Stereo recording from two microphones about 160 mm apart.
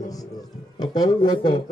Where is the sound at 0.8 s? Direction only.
25° left (ahead or behind).